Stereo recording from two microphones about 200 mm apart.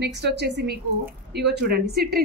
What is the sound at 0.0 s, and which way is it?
A woman's voice, 55° right (ahead or behind).